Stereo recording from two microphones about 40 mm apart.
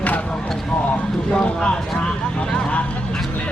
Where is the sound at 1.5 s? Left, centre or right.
Left.